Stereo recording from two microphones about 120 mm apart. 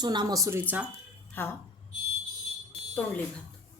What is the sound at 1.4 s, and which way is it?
Speech, 15° left (ahead or behind).